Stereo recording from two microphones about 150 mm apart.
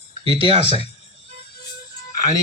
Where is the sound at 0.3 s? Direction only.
40° right (ahead or behind).